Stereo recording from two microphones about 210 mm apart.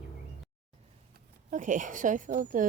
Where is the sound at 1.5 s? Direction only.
35° right (ahead or behind).